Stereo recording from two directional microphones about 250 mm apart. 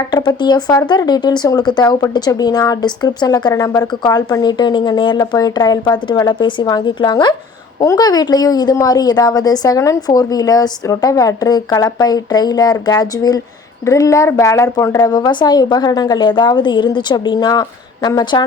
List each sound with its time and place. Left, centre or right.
0.1 s speech: centre